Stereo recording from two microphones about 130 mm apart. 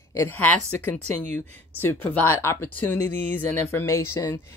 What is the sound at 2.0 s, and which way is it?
A woman's voice, 15° left (ahead or behind).